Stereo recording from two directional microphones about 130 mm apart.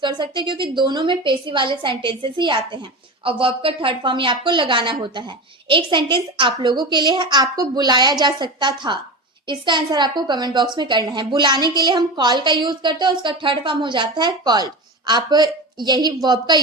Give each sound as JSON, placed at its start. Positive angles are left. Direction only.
{"t": 0.0, "sound": "a woman's voice", "side_deg": -35}